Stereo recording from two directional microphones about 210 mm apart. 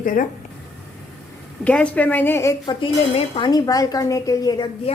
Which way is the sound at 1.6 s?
5° left (ahead or behind).